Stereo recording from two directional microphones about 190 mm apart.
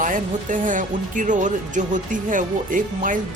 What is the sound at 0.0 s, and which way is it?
Speech, 45° right (ahead or behind).